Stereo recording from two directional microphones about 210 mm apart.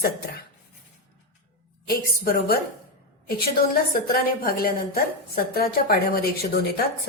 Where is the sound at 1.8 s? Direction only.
45° left (ahead or behind).